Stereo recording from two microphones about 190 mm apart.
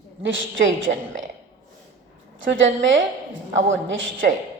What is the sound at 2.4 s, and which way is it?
Speech, 85° right.